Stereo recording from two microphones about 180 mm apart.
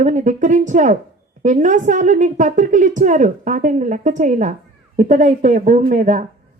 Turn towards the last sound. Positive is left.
turn(degrees=-40)  # may be behind; listen again after turning